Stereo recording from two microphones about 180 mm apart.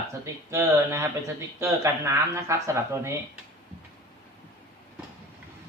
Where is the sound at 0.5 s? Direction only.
15° right (ahead or behind).